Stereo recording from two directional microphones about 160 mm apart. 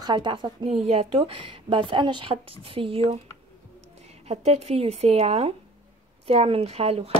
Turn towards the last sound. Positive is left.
turn(degrees=-40)  # may be behind; listen again after turning